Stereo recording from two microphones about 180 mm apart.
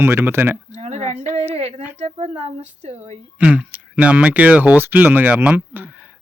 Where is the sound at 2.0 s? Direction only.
40° right (ahead or behind).